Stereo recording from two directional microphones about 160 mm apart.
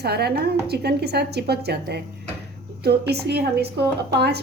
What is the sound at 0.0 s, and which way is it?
A woman's voice, 90° right.